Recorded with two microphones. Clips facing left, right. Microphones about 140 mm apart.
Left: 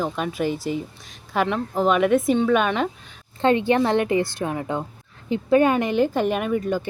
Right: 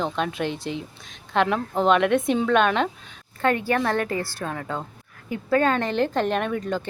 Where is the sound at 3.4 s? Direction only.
25° left (ahead or behind).